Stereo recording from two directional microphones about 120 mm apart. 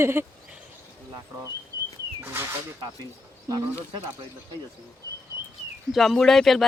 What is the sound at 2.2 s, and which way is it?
Speech, 20° right (ahead or behind).